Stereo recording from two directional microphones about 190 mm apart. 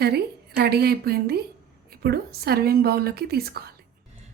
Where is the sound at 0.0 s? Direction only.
60° right (ahead or behind).